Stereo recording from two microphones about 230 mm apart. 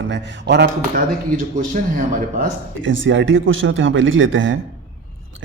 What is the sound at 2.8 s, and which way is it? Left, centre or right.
Speech, right.